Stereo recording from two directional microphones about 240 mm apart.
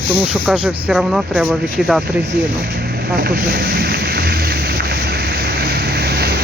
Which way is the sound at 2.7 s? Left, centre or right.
Right.